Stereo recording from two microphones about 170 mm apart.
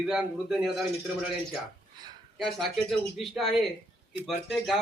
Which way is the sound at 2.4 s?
Centre (ahead or behind).